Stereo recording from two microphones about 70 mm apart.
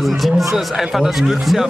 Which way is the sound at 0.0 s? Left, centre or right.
Centre.